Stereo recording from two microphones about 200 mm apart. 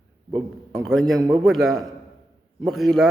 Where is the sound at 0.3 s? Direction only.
25° right (ahead or behind).